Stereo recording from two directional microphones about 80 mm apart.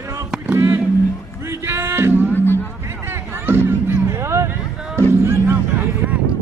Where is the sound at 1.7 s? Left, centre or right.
Right.